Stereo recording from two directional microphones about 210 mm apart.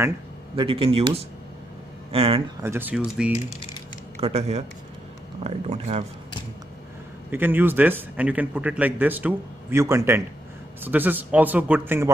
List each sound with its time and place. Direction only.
0.6 s speech: 25° right (ahead or behind)
2.6 s a man's voice: 10° right (ahead or behind)
4.2 s speech: 30° right (ahead or behind)
7.2 s a man's voice: 10° right (ahead or behind)